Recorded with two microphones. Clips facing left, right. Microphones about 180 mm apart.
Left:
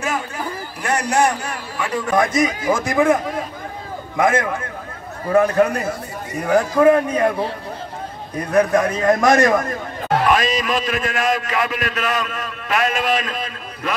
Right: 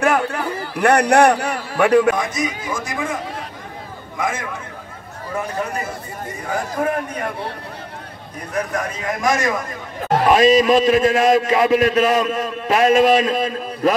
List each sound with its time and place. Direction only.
0.0 s a sound: 65° right (ahead or behind)
2.1 s a man's voice: 90° left; by 3.2 s 65° left (ahead or behind)
4.2 s speech: 60° left (ahead or behind)
8.5 s speech: 70° left (ahead or behind)
10.2 s a man's voice: 25° right (ahead or behind)